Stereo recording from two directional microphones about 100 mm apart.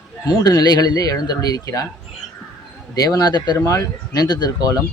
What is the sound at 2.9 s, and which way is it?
Speech, 40° left (ahead or behind).